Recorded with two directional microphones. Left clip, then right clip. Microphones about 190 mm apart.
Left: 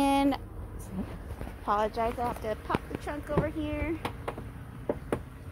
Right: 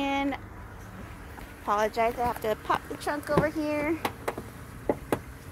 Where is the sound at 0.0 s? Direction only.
35° left (ahead or behind).